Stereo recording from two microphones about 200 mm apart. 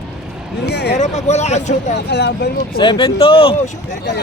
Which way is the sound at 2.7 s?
25° left (ahead or behind).